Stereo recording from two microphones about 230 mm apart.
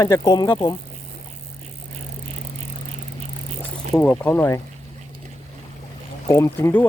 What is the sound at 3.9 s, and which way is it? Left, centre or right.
Speech, centre.